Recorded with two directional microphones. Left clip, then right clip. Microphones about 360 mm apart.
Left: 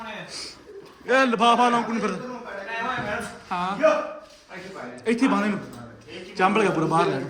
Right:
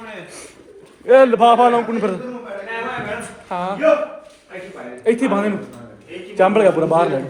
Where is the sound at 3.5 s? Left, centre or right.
Centre.